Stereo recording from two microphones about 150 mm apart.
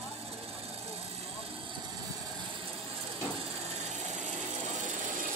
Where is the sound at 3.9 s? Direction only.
55° right (ahead or behind).